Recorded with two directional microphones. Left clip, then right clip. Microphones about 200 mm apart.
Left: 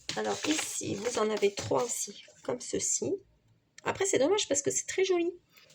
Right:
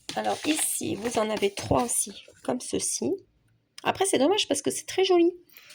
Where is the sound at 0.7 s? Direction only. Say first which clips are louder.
Right 4 dB; 50° right (ahead or behind).